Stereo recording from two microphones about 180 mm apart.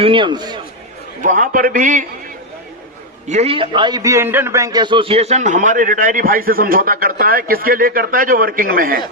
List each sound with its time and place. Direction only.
0.0 s a man's voice: 30° right (ahead or behind)
1.2 s a man's voice: 45° right (ahead or behind)
3.2 s a man's voice: 35° right (ahead or behind); by 9.0 s 55° right (ahead or behind)